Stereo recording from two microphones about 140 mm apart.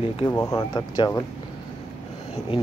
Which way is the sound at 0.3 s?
20° left (ahead or behind).